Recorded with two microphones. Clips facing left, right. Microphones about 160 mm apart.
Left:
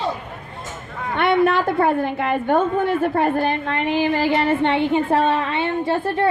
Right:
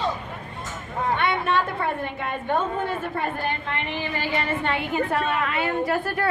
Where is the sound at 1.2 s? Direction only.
85° left.